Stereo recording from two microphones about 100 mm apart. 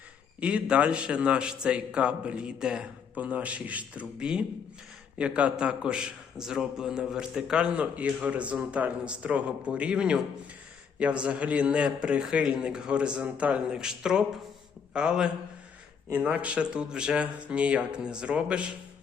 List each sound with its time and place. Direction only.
0.3 s a man's voice: 10° right (ahead or behind)